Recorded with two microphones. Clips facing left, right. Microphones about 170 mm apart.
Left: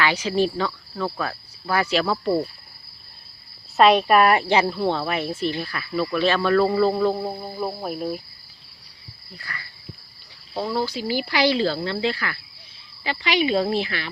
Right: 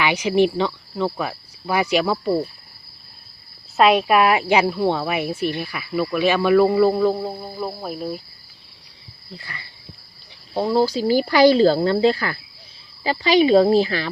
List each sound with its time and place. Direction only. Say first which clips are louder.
0.0 s speech: right 4 dB; 20° right (ahead or behind)
3.8 s speech: even; 5° right (ahead or behind)
7.3 s cricket: even; 10° left (ahead or behind)
9.3 s speech: right 1 dB; 25° right (ahead or behind)